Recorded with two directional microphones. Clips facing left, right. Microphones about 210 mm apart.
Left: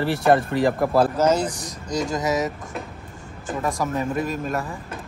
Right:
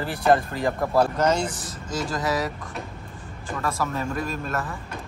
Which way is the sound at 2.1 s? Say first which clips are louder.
Left 2 dB; 20° left (ahead or behind).